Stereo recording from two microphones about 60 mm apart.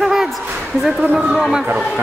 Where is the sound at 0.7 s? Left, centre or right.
Centre.